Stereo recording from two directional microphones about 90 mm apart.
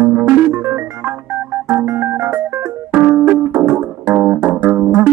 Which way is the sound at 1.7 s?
30° right (ahead or behind).